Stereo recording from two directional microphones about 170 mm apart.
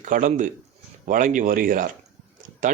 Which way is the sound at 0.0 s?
50° right (ahead or behind).